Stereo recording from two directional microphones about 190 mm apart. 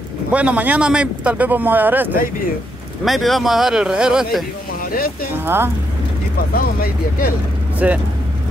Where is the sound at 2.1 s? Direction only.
50° left (ahead or behind).